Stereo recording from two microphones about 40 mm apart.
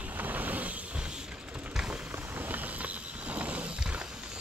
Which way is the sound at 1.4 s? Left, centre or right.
Right.